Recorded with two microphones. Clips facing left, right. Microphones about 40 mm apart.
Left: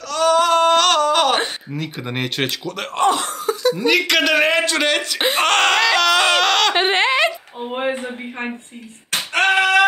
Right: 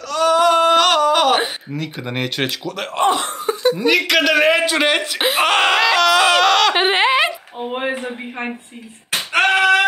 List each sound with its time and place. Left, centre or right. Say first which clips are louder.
0.1 s a sound: right 1 dB; centre
3.0 s speech: even; centre
3.3 s laughter: right 1 dB; right
3.7 s a man's voice: even; centre
4.7 s a man's voice: right 2 dB; centre
5.2 s a sound: even; centre
7.6 s speech: even; centre
9.1 s female singing: right 1 dB; centre